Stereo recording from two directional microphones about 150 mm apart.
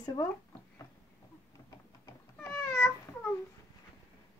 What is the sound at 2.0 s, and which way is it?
Cat, 15° left (ahead or behind).